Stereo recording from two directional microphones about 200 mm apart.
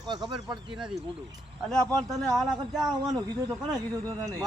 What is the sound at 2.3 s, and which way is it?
Speech, centre (ahead or behind).